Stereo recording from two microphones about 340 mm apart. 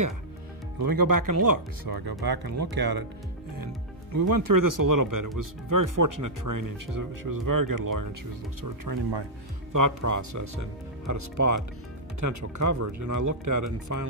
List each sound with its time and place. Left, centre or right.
0.7 s speech: right
3.5 s speech: right